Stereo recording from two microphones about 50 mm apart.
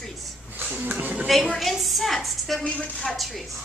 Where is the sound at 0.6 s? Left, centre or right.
Right.